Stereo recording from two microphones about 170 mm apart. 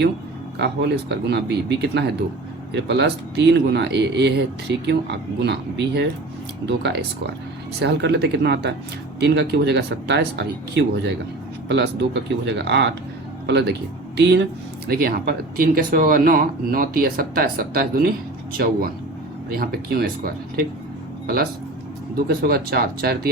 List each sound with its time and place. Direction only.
0.6 s speech: 90° right
14.8 s speech: 65° right (ahead or behind)
22.3 s speech: 65° right (ahead or behind)